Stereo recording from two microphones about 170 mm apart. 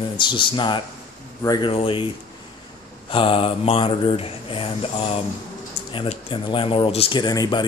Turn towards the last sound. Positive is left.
turn(degrees=25)  # may be behind; listen again after turning